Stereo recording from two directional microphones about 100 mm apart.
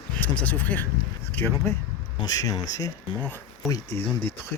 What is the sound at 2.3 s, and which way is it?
Speech, 40° left (ahead or behind).